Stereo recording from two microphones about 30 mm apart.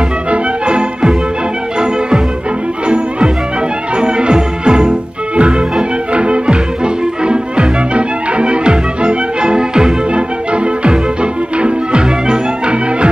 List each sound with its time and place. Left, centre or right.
0.3 s music: right
3.9 s music: right
10.5 s music: right